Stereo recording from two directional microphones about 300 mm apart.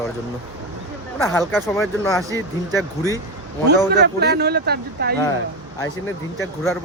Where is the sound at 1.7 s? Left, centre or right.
Centre.